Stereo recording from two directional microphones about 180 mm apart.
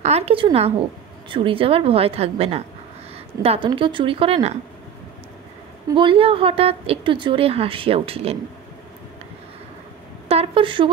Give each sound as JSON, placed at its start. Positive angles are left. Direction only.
{"t": 0.0, "sound": "speech", "side_deg": -35}
{"t": 5.9, "sound": "speech", "side_deg": -30}
{"t": 10.2, "sound": "a woman's voice", "side_deg": -35}